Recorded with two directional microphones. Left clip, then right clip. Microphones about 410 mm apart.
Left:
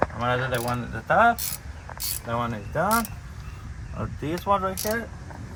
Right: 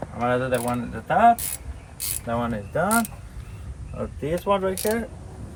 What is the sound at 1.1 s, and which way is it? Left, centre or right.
Speech, centre.